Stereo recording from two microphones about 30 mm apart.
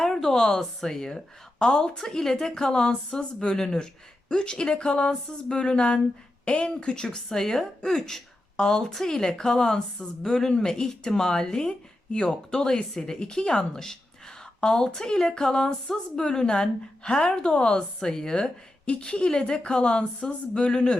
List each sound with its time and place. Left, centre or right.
0.2 s speech: centre
1.5 s a woman's voice: left
2.0 s a woman's voice: centre
7.3 s a woman's voice: centre
18.4 s a woman's voice: left